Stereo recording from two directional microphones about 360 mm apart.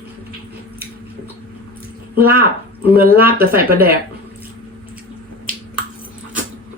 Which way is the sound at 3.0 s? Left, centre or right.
Right.